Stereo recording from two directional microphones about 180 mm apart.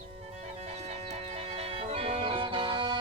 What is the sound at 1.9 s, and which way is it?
Music, 35° right (ahead or behind).